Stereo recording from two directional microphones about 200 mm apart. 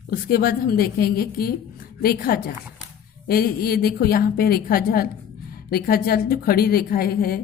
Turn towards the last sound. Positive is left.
turn(degrees=45)  # may be behind; listen again after turning